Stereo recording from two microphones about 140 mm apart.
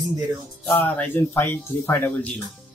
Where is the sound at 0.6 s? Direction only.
10° left (ahead or behind).